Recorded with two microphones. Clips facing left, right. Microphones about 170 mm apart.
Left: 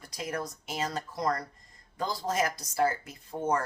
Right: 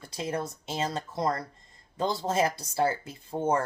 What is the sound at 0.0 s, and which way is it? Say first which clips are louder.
Speech: right 3 dB; 30° right (ahead or behind).